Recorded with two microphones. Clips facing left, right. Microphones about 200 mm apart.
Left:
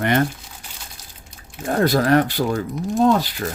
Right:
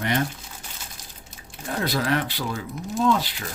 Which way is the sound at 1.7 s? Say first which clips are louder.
Left 8 dB; 45° left (ahead or behind).